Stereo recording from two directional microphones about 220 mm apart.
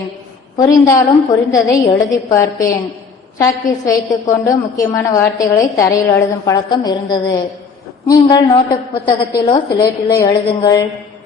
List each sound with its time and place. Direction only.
0.5 s a woman's voice: 15° left (ahead or behind)